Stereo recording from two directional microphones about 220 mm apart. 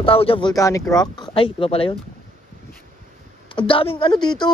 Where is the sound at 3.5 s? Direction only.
25° left (ahead or behind).